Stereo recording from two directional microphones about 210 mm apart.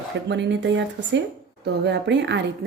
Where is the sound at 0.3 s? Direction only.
55° right (ahead or behind).